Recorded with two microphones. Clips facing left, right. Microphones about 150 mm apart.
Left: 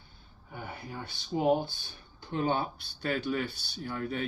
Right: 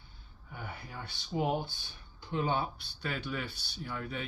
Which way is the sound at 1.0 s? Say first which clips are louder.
Left 5 dB; 40° left (ahead or behind).